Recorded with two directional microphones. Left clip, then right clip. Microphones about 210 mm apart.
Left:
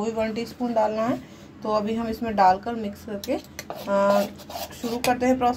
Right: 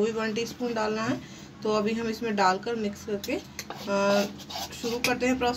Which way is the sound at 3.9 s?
20° left (ahead or behind).